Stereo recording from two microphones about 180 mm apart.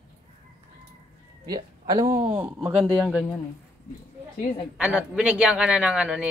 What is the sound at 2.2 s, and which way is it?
Speech, 10° right (ahead or behind).